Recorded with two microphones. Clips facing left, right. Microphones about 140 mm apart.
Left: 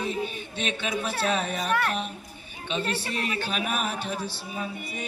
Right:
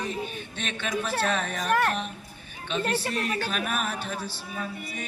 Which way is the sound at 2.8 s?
40° right (ahead or behind).